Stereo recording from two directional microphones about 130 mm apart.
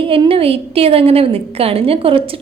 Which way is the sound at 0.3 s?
45° right (ahead or behind).